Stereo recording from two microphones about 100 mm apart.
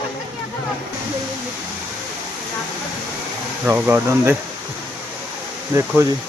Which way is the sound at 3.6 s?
15° right (ahead or behind).